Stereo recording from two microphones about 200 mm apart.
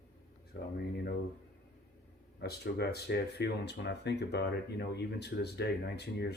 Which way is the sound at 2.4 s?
55° left (ahead or behind).